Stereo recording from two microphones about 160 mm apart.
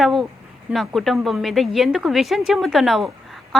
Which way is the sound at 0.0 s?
Centre (ahead or behind).